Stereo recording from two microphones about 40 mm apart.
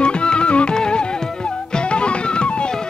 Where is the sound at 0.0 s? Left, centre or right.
Left.